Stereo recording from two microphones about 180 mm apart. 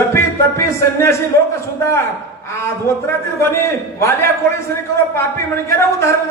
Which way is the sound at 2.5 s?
15° left (ahead or behind).